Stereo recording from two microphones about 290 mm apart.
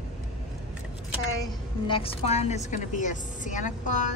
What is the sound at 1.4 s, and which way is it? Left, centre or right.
A woman's voice, centre.